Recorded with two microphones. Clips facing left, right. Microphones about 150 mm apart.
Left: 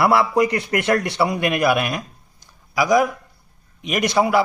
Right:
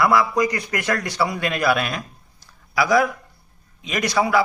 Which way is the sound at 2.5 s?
15° left (ahead or behind).